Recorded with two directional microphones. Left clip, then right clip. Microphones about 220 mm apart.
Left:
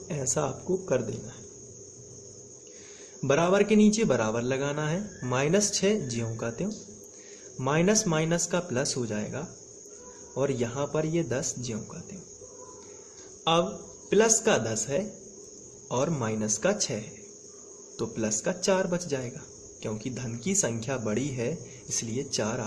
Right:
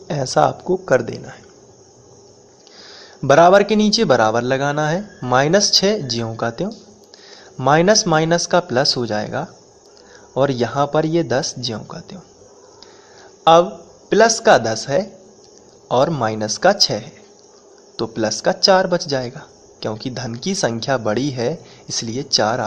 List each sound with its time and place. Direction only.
0.1 s speech: 15° right (ahead or behind)
3.2 s speech: 15° right (ahead or behind)
13.4 s speech: 20° right (ahead or behind)
17.9 s speech: 15° right (ahead or behind)